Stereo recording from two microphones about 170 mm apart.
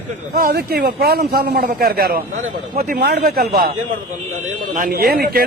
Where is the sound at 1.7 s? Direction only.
60° right (ahead or behind).